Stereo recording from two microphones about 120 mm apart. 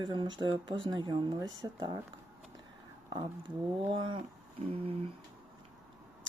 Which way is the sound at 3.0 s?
40° right (ahead or behind).